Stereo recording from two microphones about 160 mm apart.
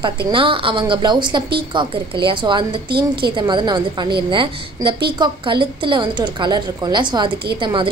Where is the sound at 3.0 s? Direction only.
80° right.